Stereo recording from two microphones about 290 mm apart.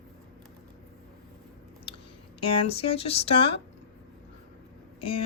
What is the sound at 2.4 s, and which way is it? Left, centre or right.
Speech, centre.